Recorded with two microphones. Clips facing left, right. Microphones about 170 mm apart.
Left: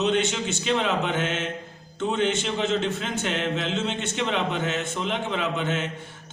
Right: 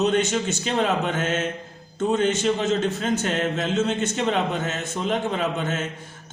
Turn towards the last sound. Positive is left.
turn(degrees=-45)  # may be behind; listen again after turning